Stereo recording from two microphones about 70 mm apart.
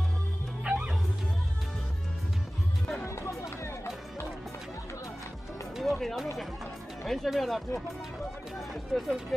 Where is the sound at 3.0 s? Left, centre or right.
Left.